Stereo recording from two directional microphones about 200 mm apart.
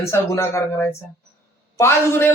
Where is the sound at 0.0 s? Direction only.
15° left (ahead or behind).